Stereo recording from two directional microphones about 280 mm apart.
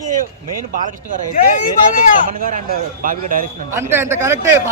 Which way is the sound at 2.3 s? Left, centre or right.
Right.